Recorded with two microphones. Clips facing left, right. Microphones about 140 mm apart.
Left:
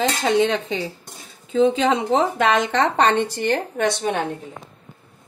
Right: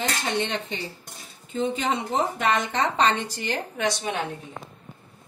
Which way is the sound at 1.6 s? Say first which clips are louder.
Left 8 dB; 90° left.